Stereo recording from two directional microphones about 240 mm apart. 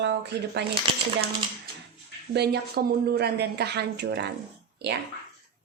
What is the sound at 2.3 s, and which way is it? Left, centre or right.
Speech, right.